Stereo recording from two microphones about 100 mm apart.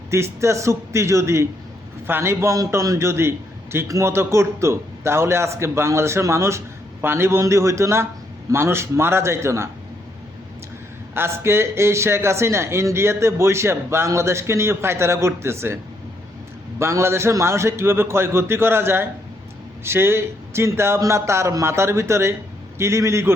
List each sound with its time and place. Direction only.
0.1 s a man's voice: 30° right (ahead or behind)
11.1 s a man's voice: 25° right (ahead or behind)